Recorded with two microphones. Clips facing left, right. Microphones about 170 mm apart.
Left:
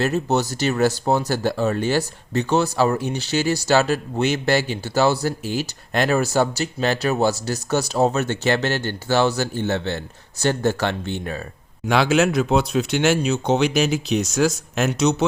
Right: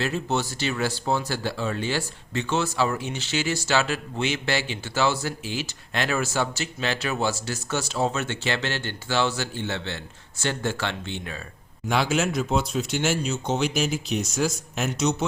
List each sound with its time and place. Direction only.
0.0 s speech: 40° left (ahead or behind)
11.9 s speech: 80° left